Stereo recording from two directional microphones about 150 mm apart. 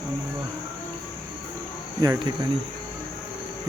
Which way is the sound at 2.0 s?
25° right (ahead or behind).